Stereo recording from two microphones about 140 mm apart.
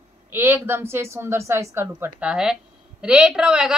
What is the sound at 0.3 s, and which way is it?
A woman's voice, 15° right (ahead or behind).